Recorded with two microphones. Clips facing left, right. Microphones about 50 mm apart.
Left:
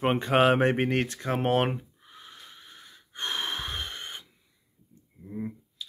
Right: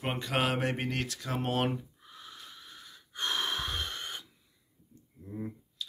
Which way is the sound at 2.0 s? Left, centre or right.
Left.